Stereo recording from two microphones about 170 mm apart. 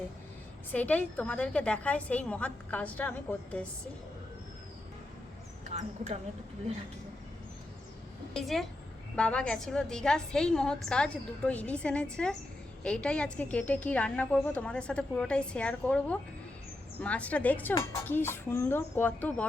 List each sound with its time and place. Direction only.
0.7 s a woman's voice: 10° left (ahead or behind)
5.6 s speech: 45° right (ahead or behind)
8.3 s a woman's voice: centre (ahead or behind)